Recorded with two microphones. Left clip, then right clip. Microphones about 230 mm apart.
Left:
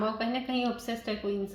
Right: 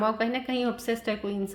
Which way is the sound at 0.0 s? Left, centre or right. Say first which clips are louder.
Right 4 dB; right.